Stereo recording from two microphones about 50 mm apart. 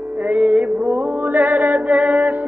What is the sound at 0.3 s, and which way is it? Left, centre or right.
Music, right.